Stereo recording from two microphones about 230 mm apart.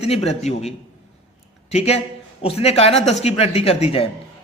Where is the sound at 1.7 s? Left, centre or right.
Left.